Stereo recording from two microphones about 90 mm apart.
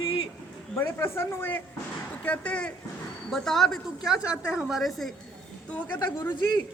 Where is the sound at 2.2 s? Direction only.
15° left (ahead or behind).